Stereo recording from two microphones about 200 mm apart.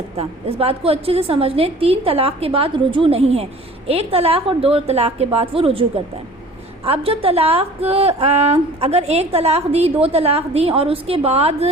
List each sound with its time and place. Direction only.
0.2 s a woman's voice: 30° right (ahead or behind)
6.8 s a woman's voice: 30° right (ahead or behind)